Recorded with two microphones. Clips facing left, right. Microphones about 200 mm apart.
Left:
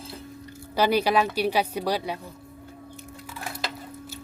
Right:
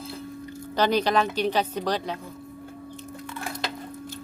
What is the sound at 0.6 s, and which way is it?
Speech, 10° left (ahead or behind).